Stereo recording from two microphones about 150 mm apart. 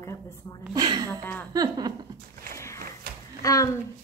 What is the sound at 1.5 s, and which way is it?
Speech, 25° right (ahead or behind).